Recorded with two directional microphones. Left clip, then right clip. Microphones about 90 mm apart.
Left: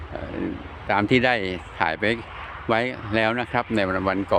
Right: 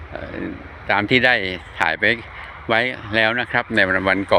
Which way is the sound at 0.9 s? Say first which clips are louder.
Right 4 dB; 35° left (ahead or behind).